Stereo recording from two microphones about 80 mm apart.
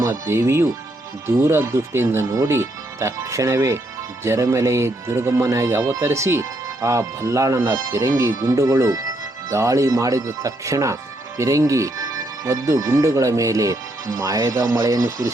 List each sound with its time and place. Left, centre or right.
0.0 s speech: right